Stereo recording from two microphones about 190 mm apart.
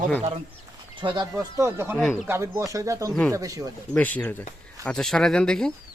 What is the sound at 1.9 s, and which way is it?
Speech, centre (ahead or behind).